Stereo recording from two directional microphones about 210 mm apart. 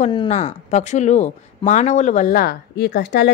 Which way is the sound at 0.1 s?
25° left (ahead or behind).